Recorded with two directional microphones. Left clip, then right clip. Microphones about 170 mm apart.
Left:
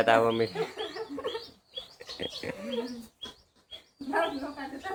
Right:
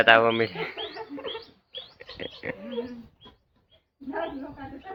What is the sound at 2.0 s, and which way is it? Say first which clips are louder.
Bird: left 1 dB; 15° left (ahead or behind).